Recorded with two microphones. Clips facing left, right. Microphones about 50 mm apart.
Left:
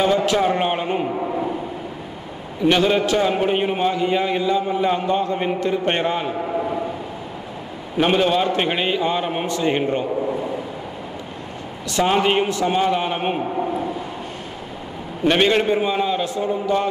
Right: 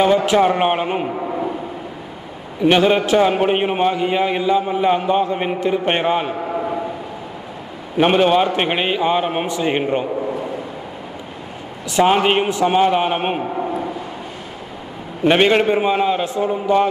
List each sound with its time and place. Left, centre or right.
0.0 s a man's voice: centre
1.1 s speech: centre
2.6 s a man's voice: right
6.3 s a man's voice: centre
8.0 s a man's voice: right
11.9 s a man's voice: centre
13.4 s a man's voice: centre
15.2 s a man's voice: centre